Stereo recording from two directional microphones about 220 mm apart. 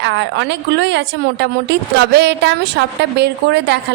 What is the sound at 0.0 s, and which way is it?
A woman's voice, 55° right (ahead or behind).